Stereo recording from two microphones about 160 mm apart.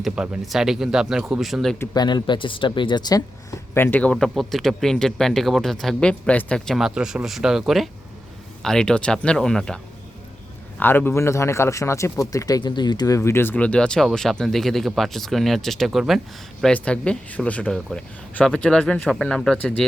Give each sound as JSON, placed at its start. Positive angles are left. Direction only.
{"t": 0.0, "sound": "speech", "side_deg": 0}
{"t": 1.8, "sound": "speech", "side_deg": 25}
{"t": 3.8, "sound": "a man's voice", "side_deg": 10}